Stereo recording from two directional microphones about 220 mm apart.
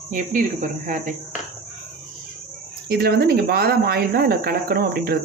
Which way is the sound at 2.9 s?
45° right (ahead or behind).